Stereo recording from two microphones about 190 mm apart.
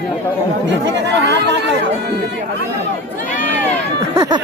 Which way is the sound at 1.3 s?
65° right (ahead or behind).